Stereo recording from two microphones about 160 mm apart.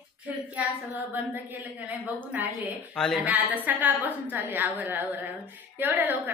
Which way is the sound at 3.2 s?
10° right (ahead or behind).